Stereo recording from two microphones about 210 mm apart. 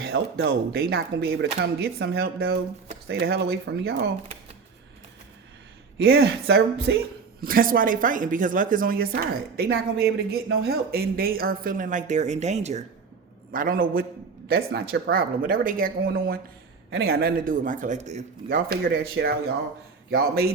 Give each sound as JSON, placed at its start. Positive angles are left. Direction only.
{"t": 0.4, "sound": "speech", "side_deg": -50}
{"t": 6.1, "sound": "speech", "side_deg": -50}